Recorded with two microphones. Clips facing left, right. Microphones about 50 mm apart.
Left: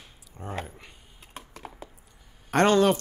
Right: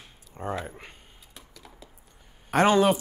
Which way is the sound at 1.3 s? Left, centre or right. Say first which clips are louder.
Left 9 dB; left.